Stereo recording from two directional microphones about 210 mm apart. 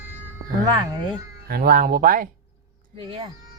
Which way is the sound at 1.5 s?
45° right (ahead or behind).